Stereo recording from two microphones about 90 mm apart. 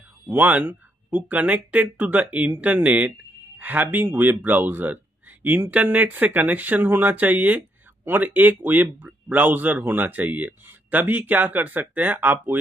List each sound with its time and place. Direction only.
0.3 s speech: 20° right (ahead or behind)